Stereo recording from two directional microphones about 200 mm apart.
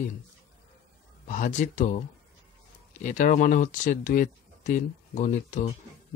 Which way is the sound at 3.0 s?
40° left (ahead or behind).